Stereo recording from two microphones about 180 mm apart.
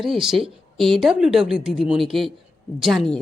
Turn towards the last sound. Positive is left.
turn(degrees=0)  # may be behind; listen again after turning